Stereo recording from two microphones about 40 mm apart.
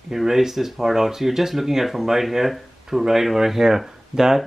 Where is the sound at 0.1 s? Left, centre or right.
Centre.